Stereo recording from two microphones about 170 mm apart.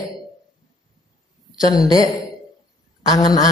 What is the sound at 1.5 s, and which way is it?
Speech, 20° left (ahead or behind).